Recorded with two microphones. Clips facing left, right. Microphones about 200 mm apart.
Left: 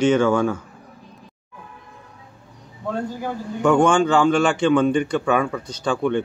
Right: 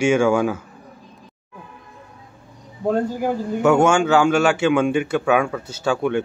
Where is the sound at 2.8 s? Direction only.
45° right (ahead or behind).